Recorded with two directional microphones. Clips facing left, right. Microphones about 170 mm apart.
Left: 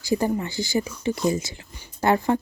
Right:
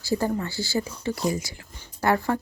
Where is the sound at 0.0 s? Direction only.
15° left (ahead or behind).